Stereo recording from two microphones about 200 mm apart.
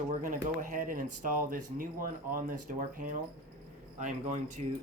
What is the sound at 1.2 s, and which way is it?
Speech, 40° right (ahead or behind).